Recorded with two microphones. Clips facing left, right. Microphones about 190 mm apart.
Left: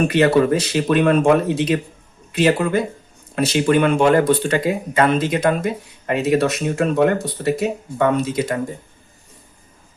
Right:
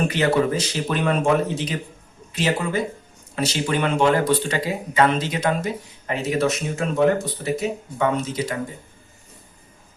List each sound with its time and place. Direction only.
0.1 s speech: 60° left (ahead or behind)